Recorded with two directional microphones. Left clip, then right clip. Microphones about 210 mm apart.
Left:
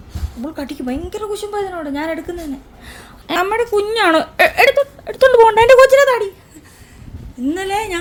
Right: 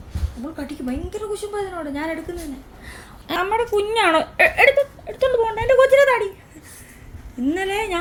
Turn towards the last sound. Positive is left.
turn(degrees=25)  # may be behind; listen again after turning